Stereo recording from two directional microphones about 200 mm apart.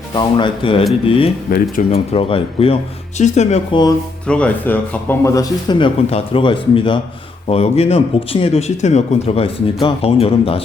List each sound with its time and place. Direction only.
0.1 s speech: 20° left (ahead or behind)
4.3 s speech: 5° left (ahead or behind); by 10.6 s 30° left (ahead or behind)